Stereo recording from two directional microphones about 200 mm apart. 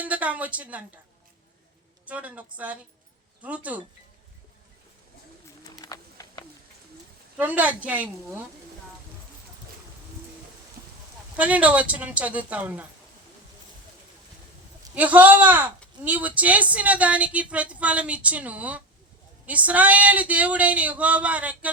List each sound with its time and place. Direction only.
0.0 s speech: 5° right (ahead or behind)
2.0 s a woman's voice: 5° right (ahead or behind)
5.8 s clip-clop: 20° left (ahead or behind)
7.3 s a woman's voice: 5° right (ahead or behind)
11.3 s a woman's voice: 5° right (ahead or behind)
14.9 s a woman's voice: 5° right (ahead or behind)